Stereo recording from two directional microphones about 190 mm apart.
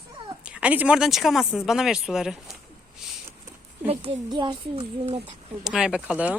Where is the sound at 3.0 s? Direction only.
Centre (ahead or behind).